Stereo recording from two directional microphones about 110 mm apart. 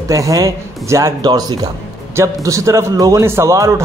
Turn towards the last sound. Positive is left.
turn(degrees=-30)  # may be behind; listen again after turning